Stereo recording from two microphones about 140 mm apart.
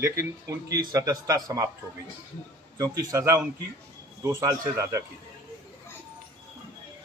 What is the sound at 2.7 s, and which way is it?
A man's voice, 25° right (ahead or behind).